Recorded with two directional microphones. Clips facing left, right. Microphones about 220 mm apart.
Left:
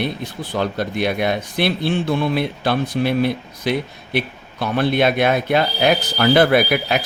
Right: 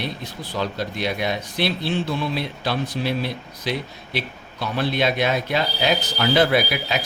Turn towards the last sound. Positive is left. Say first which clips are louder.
# left 5 dB
turn(degrees=55)  # may be behind; listen again after turning